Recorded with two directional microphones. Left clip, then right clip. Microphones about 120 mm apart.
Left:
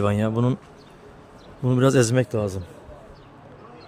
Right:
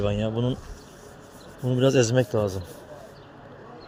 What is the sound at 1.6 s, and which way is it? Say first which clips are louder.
Speech: left 2 dB; 50° left (ahead or behind).